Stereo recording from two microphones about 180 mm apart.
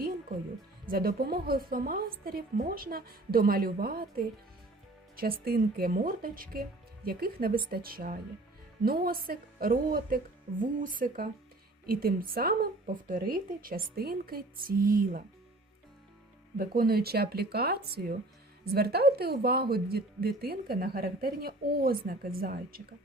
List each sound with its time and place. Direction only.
0.9 s a woman's voice: 55° right (ahead or behind)
5.5 s a woman's voice: 55° right (ahead or behind)
16.6 s a woman's voice: 55° right (ahead or behind)